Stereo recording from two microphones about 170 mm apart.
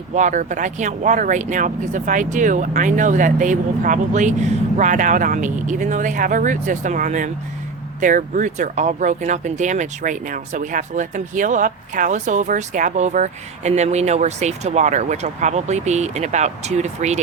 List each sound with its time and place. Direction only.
0.1 s speech: 45° right (ahead or behind)